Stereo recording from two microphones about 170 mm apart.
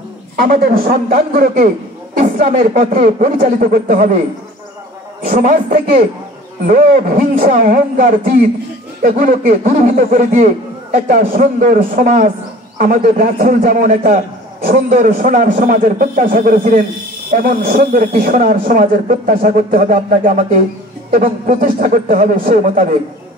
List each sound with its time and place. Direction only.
0.4 s a man's voice: 60° right (ahead or behind)
5.3 s a man's voice: 55° right (ahead or behind)